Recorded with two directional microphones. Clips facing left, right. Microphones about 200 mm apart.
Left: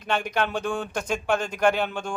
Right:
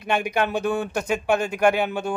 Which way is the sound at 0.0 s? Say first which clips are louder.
Right 3 dB; 10° right (ahead or behind).